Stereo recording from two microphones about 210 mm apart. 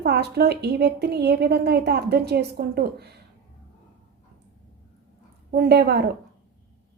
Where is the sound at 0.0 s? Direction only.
50° right (ahead or behind).